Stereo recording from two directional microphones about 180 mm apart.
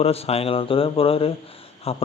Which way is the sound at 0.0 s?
35° left (ahead or behind).